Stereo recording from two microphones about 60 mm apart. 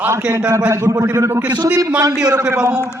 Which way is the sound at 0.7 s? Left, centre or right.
Right.